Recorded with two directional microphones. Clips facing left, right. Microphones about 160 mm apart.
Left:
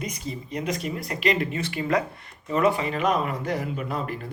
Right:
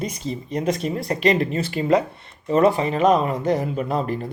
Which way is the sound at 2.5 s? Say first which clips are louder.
Right 5 dB; 35° right (ahead or behind).